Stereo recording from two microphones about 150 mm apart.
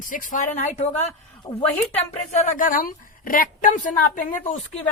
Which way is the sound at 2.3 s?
60° left (ahead or behind).